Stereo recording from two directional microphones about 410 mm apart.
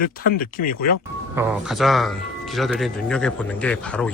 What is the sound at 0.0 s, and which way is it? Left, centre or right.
Speech, left.